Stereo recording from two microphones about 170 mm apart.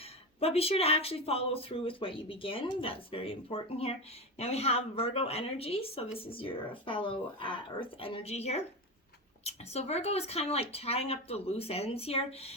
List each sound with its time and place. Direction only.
0.3 s speech: 35° left (ahead or behind)